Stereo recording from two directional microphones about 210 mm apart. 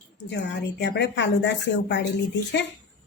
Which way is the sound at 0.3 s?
55° left (ahead or behind).